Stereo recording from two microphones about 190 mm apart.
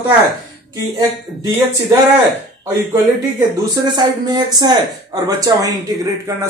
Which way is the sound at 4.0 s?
20° right (ahead or behind).